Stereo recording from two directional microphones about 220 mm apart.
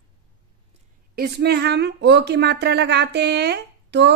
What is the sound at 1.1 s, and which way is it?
Speech, 45° right (ahead or behind).